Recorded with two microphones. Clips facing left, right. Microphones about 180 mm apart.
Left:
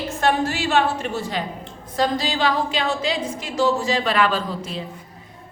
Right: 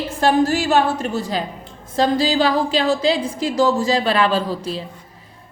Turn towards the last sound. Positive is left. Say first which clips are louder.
# right 4 dB
turn(degrees=-35)  # may be behind; listen again after turning